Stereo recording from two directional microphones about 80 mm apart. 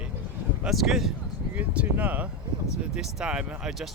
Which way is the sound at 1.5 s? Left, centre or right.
Centre.